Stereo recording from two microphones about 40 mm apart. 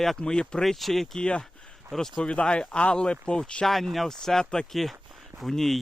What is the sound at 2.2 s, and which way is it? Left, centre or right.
Speech, left.